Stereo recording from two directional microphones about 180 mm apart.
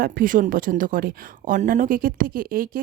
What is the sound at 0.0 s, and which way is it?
Speech, 50° right (ahead or behind).